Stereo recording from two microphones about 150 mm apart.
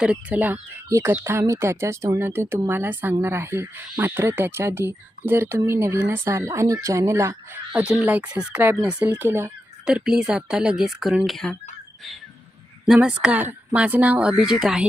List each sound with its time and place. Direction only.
0.0 s speech: 10° right (ahead or behind)
7.7 s speech: 10° right (ahead or behind)
12.8 s speech: 5° right (ahead or behind)